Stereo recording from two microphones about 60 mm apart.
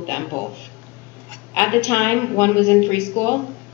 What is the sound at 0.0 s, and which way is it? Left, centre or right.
A woman's voice, left.